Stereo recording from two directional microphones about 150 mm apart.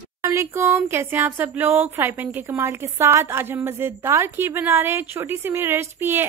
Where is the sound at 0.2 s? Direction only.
20° right (ahead or behind).